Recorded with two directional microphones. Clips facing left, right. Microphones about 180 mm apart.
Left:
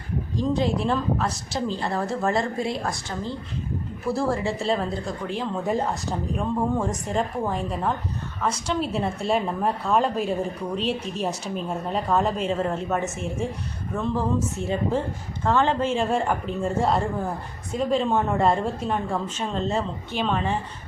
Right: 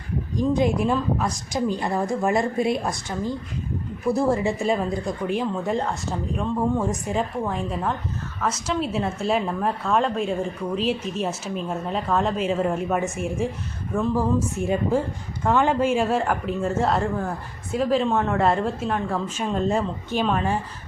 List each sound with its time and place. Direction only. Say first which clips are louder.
0.3 s a woman's voice: right 3 dB; 15° right (ahead or behind)
4.1 s speech: right 3 dB; 20° right (ahead or behind)
5.6 s speech: even; centre (ahead or behind)
6.8 s a woman's voice: right 1 dB; 5° right (ahead or behind)
19.4 s a woman's voice: right 5 dB; 10° right (ahead or behind)